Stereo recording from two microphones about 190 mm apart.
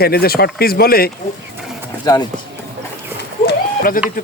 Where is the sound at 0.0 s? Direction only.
55° left (ahead or behind).